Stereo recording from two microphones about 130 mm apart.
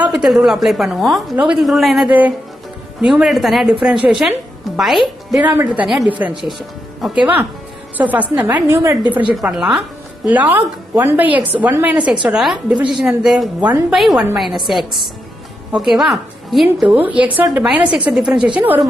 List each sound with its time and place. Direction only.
0.1 s a woman's voice: centre (ahead or behind)
2.0 s a woman's voice: 10° right (ahead or behind)
5.4 s speech: 15° right (ahead or behind)
8.6 s a woman's voice: 20° right (ahead or behind)
9.3 s a woman's voice: 5° right (ahead or behind)
16.9 s a woman's voice: 10° right (ahead or behind)